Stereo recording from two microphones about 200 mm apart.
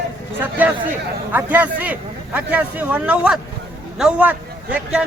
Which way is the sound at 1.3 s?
10° right (ahead or behind).